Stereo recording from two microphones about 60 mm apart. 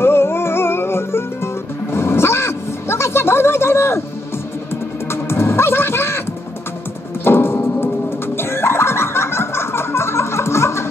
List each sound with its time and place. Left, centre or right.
0.0 s music: left
5.1 s music: left
7.2 s music: left
8.4 s a sound: left